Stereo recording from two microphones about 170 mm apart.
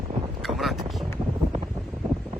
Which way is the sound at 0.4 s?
Centre (ahead or behind).